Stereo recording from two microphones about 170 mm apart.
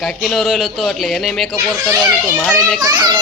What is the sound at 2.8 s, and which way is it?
Speech, 25° right (ahead or behind).